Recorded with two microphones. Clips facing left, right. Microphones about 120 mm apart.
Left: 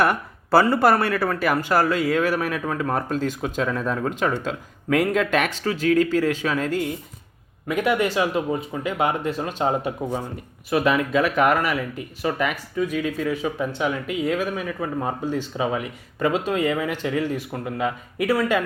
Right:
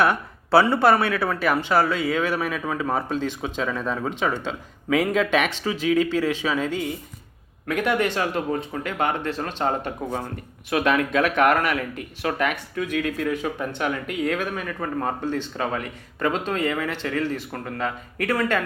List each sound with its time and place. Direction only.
0.0 s speech: 5° left (ahead or behind)